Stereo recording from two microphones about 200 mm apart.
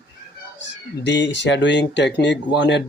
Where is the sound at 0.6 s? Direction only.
65° left (ahead or behind).